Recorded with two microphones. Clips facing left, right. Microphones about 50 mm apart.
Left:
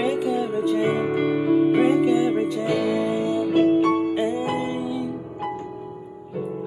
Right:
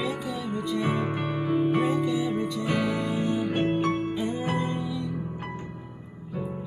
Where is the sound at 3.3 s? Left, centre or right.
Right.